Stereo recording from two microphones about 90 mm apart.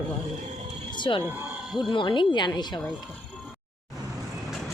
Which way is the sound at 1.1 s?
65° left (ahead or behind).